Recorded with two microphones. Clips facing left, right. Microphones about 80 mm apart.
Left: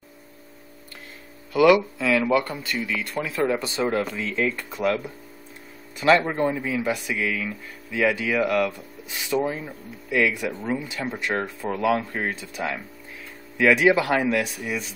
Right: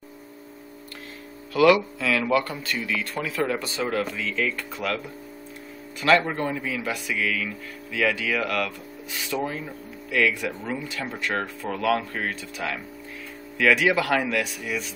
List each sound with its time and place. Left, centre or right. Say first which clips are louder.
1.5 s speech: left 1 dB; centre
4.2 s speech: left 2 dB; left